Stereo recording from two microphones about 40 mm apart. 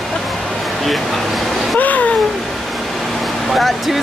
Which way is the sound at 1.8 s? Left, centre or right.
Left.